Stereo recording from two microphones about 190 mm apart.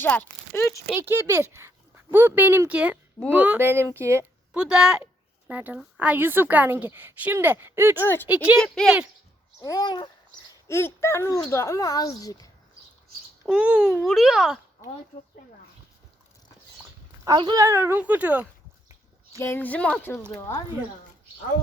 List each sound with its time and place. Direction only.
0.0 s speech: 10° left (ahead or behind)
0.9 s a woman's voice: 10° right (ahead or behind)
8.0 s speech: 10° left (ahead or behind)
9.6 s speech: 20° left (ahead or behind)
13.4 s speech: 5° right (ahead or behind)
17.2 s a woman's voice: 20° right (ahead or behind)
19.4 s speech: 10° left (ahead or behind)